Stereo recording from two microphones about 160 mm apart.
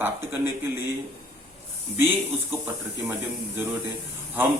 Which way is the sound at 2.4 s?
15° right (ahead or behind).